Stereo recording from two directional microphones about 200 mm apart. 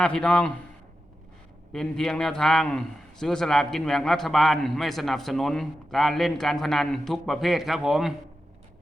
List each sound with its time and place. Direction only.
0.0 s a man's voice: 5° left (ahead or behind)
1.7 s a man's voice: centre (ahead or behind)